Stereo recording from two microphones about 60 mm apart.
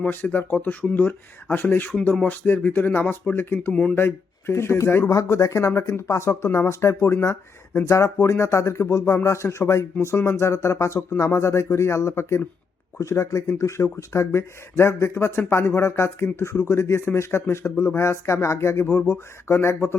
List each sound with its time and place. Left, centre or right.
0.1 s speech: left
3.7 s speech: centre
3.9 s speech: left